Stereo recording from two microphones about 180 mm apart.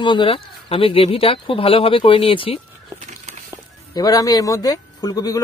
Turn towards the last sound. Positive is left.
turn(degrees=20)  # may be behind; listen again after turning